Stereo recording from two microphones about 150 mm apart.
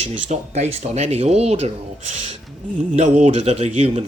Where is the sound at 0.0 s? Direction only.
50° right (ahead or behind).